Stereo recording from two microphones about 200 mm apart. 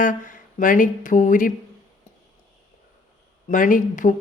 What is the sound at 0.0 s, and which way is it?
Speech, 40° left (ahead or behind).